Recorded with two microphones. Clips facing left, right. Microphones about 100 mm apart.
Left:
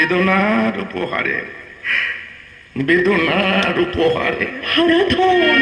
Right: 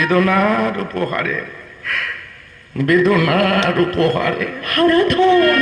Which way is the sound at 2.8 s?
35° right (ahead or behind).